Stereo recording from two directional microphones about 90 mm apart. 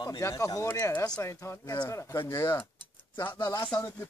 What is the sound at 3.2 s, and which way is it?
Speech, 55° left (ahead or behind).